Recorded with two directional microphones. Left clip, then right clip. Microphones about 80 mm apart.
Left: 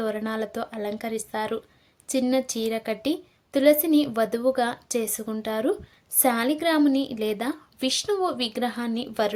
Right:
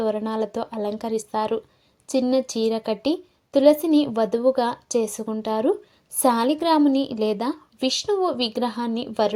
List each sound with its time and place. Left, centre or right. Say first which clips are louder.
0.0 s a woman's voice: right 4 dB; centre